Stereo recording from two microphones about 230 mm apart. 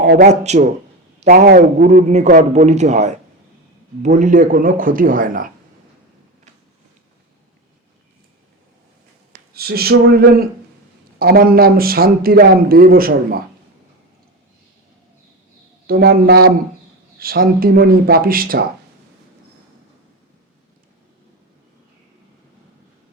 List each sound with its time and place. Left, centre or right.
0.3 s a man's voice: right
9.3 s a man's voice: right
15.9 s a man's voice: right